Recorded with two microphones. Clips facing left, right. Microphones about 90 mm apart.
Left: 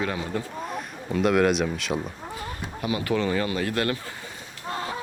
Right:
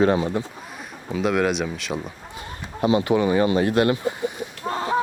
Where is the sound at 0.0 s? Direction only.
35° right (ahead or behind).